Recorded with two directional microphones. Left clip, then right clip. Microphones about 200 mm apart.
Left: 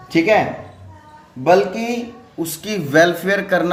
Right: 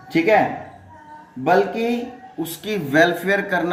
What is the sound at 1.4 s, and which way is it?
Speech, 30° left (ahead or behind).